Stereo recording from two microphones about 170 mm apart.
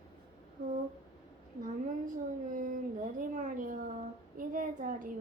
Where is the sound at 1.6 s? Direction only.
50° right (ahead or behind).